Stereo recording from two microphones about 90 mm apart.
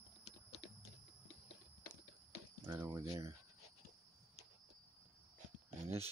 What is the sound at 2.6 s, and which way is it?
Speech, 35° right (ahead or behind).